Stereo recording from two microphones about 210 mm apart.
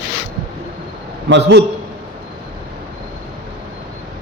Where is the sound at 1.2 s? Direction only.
55° right (ahead or behind).